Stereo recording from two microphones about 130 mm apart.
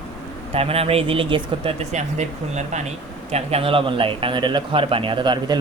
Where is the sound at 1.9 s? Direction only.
65° right (ahead or behind).